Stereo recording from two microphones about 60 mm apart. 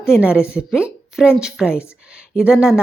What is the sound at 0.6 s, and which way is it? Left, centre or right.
A woman's voice, centre.